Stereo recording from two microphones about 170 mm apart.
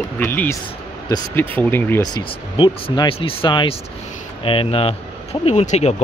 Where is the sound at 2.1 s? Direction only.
30° left (ahead or behind).